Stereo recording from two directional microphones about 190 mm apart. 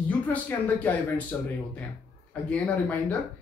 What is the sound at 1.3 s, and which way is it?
Speech, 10° left (ahead or behind).